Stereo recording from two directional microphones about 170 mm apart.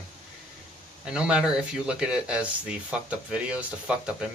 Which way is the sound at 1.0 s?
5° right (ahead or behind).